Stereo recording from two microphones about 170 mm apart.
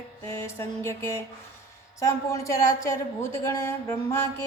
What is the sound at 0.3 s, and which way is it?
Speech, 15° left (ahead or behind).